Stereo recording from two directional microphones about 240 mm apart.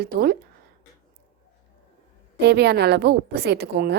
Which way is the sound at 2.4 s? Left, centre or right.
Right.